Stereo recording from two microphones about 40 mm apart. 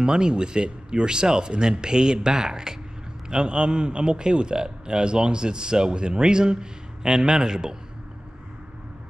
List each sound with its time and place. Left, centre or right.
0.0 s a man's voice: right